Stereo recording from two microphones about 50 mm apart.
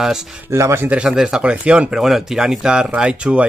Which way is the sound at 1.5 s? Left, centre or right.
Right.